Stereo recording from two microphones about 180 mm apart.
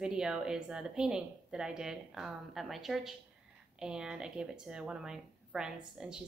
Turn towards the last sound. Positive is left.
turn(degrees=-5)  # may be behind; listen again after turning